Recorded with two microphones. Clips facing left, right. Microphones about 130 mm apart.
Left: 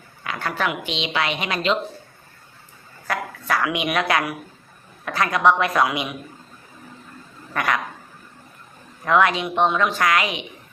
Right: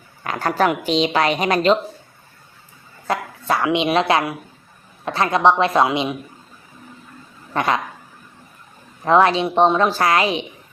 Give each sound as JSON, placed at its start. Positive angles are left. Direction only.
{"t": 0.3, "sound": "a woman's voice", "side_deg": -40}
{"t": 3.1, "sound": "a woman's voice", "side_deg": -25}
{"t": 7.5, "sound": "dog", "side_deg": -25}
{"t": 9.0, "sound": "a woman's voice", "side_deg": -30}